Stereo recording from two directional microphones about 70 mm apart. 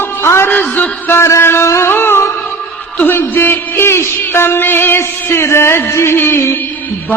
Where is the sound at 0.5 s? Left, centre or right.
Left.